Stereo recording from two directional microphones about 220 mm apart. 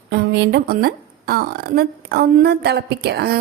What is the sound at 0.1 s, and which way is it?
A woman's voice, 50° right (ahead or behind).